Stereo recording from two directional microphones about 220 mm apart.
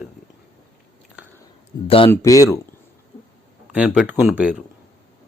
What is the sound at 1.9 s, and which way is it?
Speech, 25° left (ahead or behind).